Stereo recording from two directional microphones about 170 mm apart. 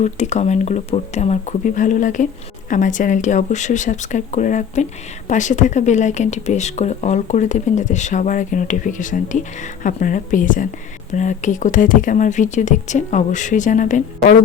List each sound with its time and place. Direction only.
0.0 s speech: 40° left (ahead or behind)